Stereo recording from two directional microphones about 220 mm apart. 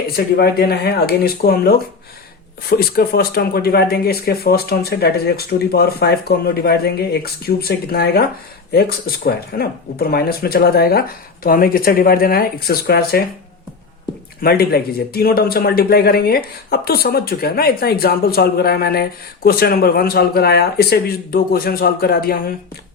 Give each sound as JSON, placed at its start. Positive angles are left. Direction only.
{"t": 0.3, "sound": "a man's voice", "side_deg": 45}
{"t": 14.4, "sound": "a man's voice", "side_deg": 45}